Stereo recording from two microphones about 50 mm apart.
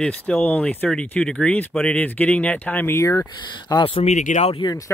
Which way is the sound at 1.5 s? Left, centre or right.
Left.